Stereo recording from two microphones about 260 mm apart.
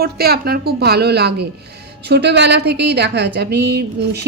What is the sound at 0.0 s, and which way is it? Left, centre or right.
A woman's voice, right.